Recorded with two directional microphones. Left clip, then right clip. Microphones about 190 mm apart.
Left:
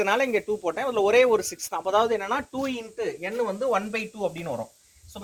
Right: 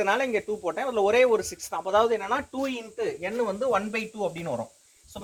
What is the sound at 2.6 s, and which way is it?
Speech, 15° left (ahead or behind).